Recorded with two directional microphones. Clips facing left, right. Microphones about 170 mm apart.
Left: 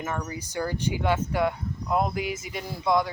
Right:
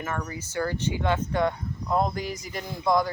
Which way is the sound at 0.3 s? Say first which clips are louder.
Right 1 dB; 15° left (ahead or behind).